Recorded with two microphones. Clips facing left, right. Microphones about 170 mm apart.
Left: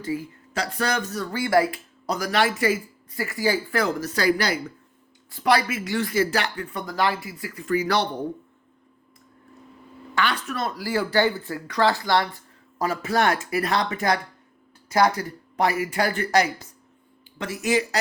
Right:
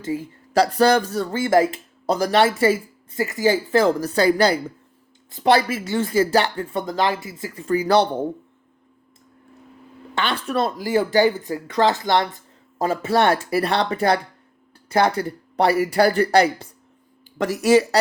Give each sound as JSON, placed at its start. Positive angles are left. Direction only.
{"t": 0.2, "sound": "speech", "side_deg": -35}
{"t": 10.2, "sound": "speech", "side_deg": -25}